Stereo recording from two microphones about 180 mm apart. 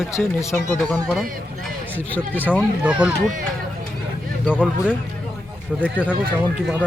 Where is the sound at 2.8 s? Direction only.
5° right (ahead or behind).